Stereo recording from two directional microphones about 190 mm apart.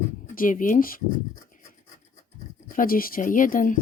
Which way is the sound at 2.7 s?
50° left (ahead or behind).